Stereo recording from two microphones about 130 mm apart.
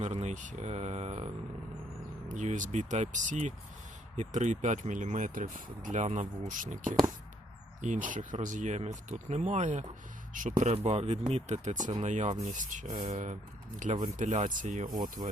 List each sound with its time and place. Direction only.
0.0 s speech: 60° right (ahead or behind)
2.3 s speech: 70° right (ahead or behind); by 6.9 s 85° right
8.0 s speech: 85° right; by 9.8 s 65° right (ahead or behind)
10.3 s speech: 80° right
12.9 s speech: 50° right (ahead or behind)
13.7 s speech: 70° right (ahead or behind); by 15.3 s 90° right